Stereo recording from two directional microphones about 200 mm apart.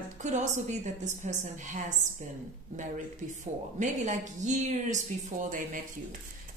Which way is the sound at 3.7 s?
40° right (ahead or behind).